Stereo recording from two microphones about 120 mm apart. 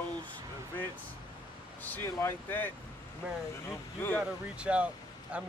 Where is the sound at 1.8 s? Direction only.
15° left (ahead or behind).